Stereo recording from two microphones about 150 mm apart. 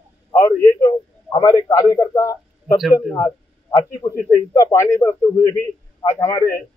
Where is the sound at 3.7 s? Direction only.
25° left (ahead or behind).